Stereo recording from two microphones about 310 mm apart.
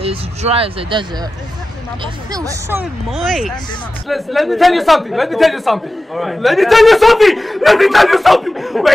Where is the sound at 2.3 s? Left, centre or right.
Centre.